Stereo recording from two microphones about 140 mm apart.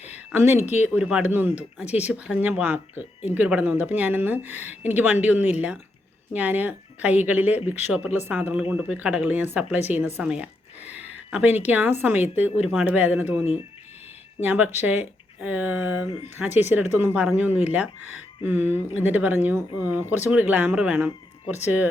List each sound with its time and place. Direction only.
0.3 s speech: 15° right (ahead or behind)
10.2 s a sound: 10° right (ahead or behind)
11.7 s speech: 15° right (ahead or behind)
16.5 s speech: 55° left (ahead or behind)
16.7 s speech: 15° right (ahead or behind)